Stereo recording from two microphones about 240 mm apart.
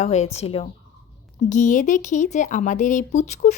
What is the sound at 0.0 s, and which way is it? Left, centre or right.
A woman's voice, left.